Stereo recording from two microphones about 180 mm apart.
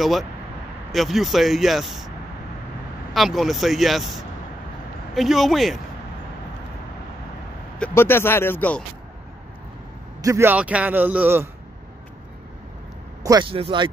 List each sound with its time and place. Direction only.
0.0 s speech: centre (ahead or behind)
3.1 s speech: centre (ahead or behind)
5.1 s speech: centre (ahead or behind)
7.8 s speech: 10° left (ahead or behind)
10.2 s a man's voice: 15° right (ahead or behind)
13.2 s speech: 20° right (ahead or behind)